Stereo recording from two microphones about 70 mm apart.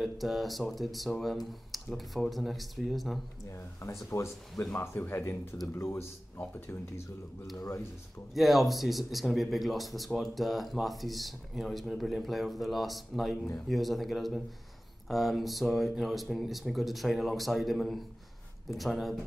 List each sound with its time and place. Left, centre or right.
0.0 s speech: centre
4.1 s speech: left
8.4 s speech: centre